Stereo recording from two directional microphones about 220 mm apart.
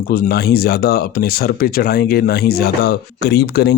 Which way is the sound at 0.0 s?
45° left (ahead or behind).